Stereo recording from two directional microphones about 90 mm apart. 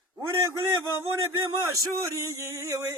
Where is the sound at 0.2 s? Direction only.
35° right (ahead or behind).